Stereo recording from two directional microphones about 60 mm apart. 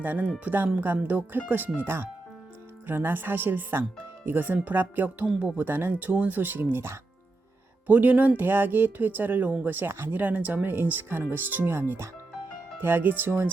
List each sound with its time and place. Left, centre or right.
0.0 s speech: right
5.5 s speech: right
7.9 s speech: right
8.4 s speech: right